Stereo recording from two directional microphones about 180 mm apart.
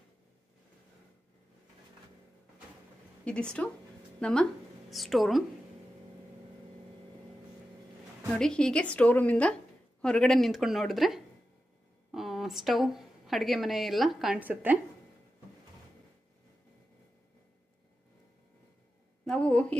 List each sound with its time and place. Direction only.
3.3 s speech: 5° left (ahead or behind)
8.3 s a woman's voice: 5° left (ahead or behind)
19.2 s a sound: 5° left (ahead or behind)